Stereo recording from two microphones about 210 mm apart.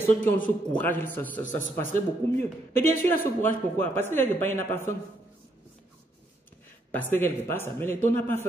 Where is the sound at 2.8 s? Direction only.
10° left (ahead or behind).